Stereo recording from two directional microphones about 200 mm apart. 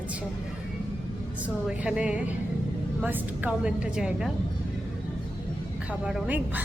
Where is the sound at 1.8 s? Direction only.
5° right (ahead or behind).